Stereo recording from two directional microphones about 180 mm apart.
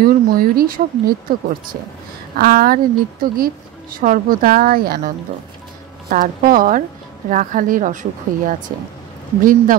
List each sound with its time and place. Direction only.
0.0 s speech: 55° right (ahead or behind)
2.3 s a woman's voice: 55° right (ahead or behind)